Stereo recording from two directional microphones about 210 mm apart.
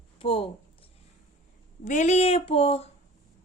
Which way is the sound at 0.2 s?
25° left (ahead or behind).